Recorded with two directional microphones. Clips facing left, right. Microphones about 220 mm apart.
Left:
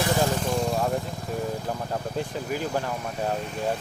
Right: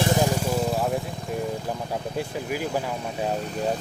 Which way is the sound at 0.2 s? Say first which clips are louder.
Right 1 dB; 10° right (ahead or behind).